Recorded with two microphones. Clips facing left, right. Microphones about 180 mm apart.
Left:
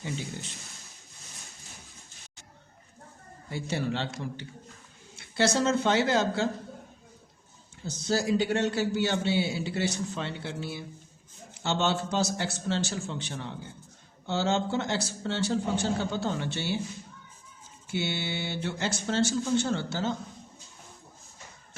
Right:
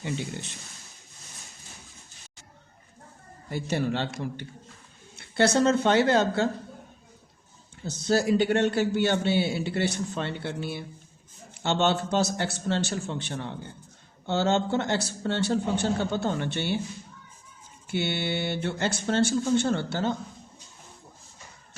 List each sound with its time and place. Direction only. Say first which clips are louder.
3.5 s a man's voice: right 3 dB; 55° right (ahead or behind)
5.1 s a man's voice: right 3 dB; 55° right (ahead or behind)
7.9 s a man's voice: right 4 dB; 60° right (ahead or behind)
17.8 s a man's voice: right 3 dB; 60° right (ahead or behind)